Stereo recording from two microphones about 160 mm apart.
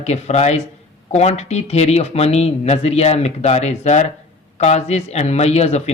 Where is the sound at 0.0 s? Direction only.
45° left (ahead or behind).